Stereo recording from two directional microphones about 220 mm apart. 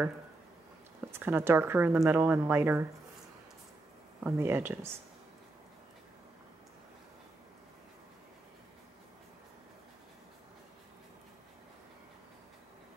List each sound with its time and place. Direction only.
1.1 s speech: 10° right (ahead or behind)
4.2 s speech: 10° right (ahead or behind)